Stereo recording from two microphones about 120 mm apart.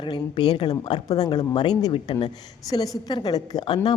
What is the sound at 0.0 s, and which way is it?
A man's voice, 40° left (ahead or behind).